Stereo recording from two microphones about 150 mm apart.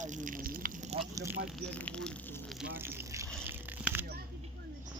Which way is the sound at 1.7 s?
5° left (ahead or behind).